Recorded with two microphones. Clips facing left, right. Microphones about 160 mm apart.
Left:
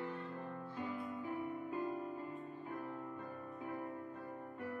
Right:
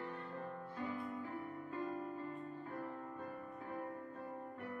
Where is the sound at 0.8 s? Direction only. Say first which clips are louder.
Even; 15° left (ahead or behind).